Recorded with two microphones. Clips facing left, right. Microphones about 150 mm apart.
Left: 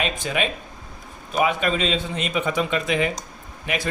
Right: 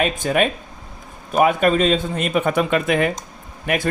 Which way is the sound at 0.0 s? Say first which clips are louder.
Right 6 dB; 50° right (ahead or behind).